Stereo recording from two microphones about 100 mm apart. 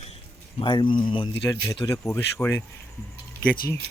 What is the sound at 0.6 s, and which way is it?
Speech, 55° left (ahead or behind).